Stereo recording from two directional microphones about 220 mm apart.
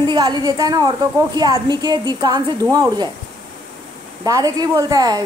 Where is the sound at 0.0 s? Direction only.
20° right (ahead or behind).